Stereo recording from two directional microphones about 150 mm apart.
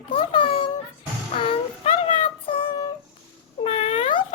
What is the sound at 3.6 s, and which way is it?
Cat, 45° left (ahead or behind).